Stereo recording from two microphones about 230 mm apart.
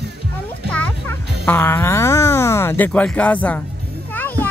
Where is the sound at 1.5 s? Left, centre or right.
Centre.